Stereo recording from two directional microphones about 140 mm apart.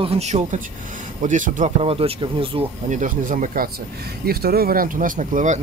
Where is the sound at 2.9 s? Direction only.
70° right (ahead or behind).